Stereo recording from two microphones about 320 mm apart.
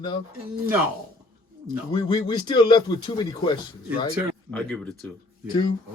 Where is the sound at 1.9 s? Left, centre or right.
Centre.